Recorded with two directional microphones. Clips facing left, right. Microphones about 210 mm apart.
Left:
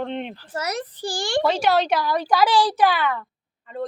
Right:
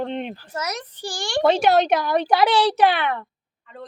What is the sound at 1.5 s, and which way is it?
Speech, 20° right (ahead or behind).